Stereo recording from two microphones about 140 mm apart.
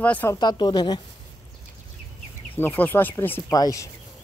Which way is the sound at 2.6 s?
15° left (ahead or behind).